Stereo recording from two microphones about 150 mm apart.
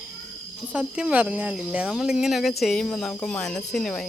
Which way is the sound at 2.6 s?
Centre (ahead or behind).